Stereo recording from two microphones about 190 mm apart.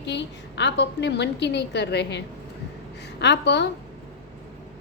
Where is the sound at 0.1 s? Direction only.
65° left (ahead or behind).